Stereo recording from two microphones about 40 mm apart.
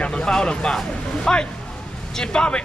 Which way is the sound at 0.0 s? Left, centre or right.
Left.